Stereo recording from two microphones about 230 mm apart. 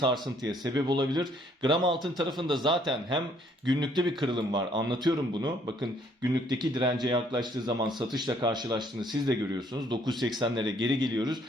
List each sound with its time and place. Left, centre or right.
0.0 s a man's voice: centre